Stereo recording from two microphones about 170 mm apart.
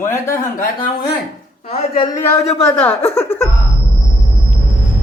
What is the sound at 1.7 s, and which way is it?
Speech, 35° left (ahead or behind).